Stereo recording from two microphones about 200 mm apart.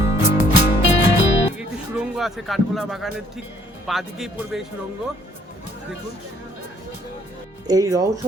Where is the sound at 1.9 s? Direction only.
Centre (ahead or behind).